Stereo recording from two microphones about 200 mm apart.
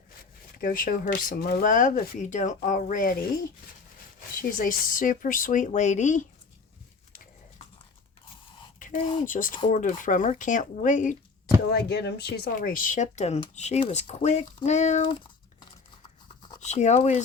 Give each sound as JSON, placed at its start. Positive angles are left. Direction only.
{"t": 0.6, "sound": "speech", "side_deg": 45}
{"t": 4.4, "sound": "speech", "side_deg": 45}
{"t": 8.8, "sound": "a sound", "side_deg": 40}
{"t": 9.2, "sound": "speech", "side_deg": 40}
{"t": 11.7, "sound": "speech", "side_deg": 55}
{"t": 16.6, "sound": "speech", "side_deg": 35}